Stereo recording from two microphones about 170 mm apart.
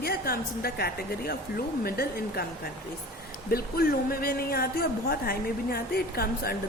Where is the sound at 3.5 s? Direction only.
60° left (ahead or behind).